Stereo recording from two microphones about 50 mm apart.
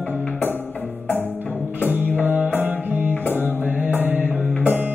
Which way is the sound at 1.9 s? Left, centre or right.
Right.